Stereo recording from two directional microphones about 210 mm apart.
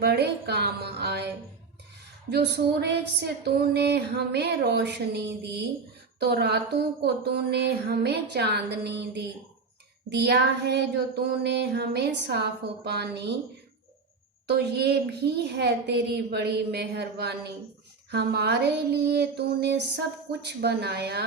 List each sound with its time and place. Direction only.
0.0 s a woman's voice: 50° right (ahead or behind)
2.3 s a woman's voice: 50° right (ahead or behind)
14.4 s a woman's voice: 50° right (ahead or behind)